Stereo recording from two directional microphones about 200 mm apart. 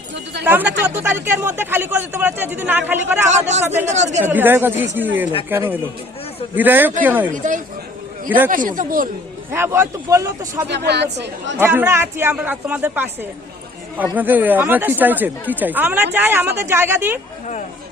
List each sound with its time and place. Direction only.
0.4 s a man's voice: 10° right (ahead or behind)
3.2 s a man's voice: 35° right (ahead or behind)
4.2 s a man's voice: 10° right (ahead or behind)
8.4 s speech: 40° right (ahead or behind)
9.5 s a man's voice: 10° right (ahead or behind)
10.7 s speech: 60° right (ahead or behind)
11.6 s a man's voice: 10° right (ahead or behind)
14.2 s a man's voice: 10° right (ahead or behind)